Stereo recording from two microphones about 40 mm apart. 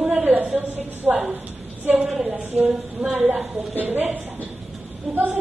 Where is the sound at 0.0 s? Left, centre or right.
Right.